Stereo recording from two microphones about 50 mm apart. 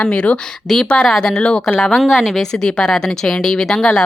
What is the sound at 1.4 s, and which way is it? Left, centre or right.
Speech, left.